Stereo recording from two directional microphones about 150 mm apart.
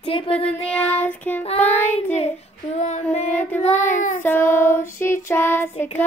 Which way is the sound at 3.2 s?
10° left (ahead or behind).